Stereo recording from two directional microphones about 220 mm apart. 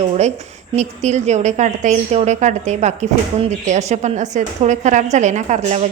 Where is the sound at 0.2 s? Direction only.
30° right (ahead or behind).